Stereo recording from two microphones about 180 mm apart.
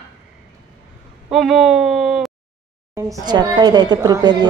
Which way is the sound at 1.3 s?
Centre (ahead or behind).